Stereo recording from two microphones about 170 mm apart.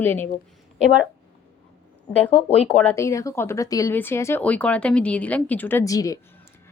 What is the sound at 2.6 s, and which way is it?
Speech, 5° left (ahead or behind).